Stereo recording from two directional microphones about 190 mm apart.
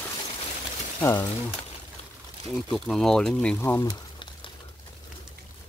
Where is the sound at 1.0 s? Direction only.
15° left (ahead or behind).